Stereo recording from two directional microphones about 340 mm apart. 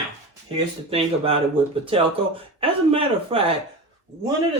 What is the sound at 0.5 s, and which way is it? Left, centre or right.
Speech, centre.